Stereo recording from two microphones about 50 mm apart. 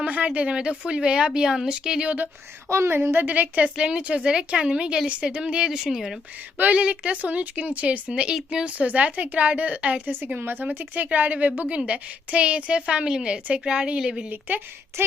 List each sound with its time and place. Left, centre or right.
0.0 s a woman's voice: right
2.0 s a woman's voice: right
2.6 s a woman's voice: right
3.0 s a woman's voice: right
3.8 s a woman's voice: centre
6.7 s a woman's voice: right
10.3 s a woman's voice: right; by 14.3 s centre
14.3 s a woman's voice: right
15.0 s a woman's voice: right